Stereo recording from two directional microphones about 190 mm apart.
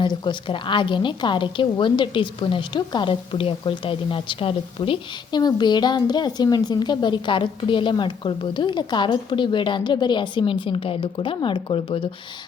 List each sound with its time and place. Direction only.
0.0 s a woman's voice: 25° left (ahead or behind)